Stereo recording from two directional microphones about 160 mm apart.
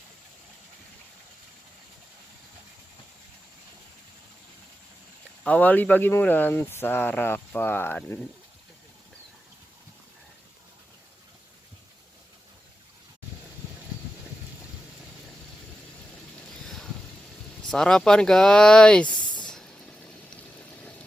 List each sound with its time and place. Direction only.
5.4 s speech: 10° left (ahead or behind)
16.5 s vehicle: 5° left (ahead or behind)
17.7 s speech: 5° left (ahead or behind)
19.0 s a sound: 30° left (ahead or behind)